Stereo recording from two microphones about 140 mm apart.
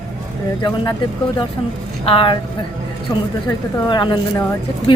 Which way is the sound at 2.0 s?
40° left (ahead or behind).